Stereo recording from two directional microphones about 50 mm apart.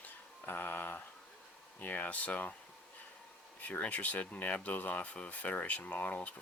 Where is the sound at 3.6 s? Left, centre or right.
Left.